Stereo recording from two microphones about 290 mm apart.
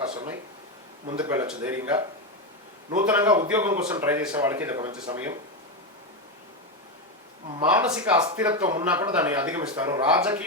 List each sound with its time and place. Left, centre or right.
0.0 s a sound: centre
1.0 s speech: centre
3.1 s speech: centre
7.6 s a man's voice: centre